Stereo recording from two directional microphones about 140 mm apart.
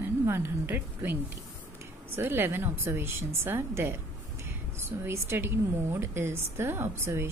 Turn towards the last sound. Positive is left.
turn(degrees=-15)  # may be behind; listen again after turning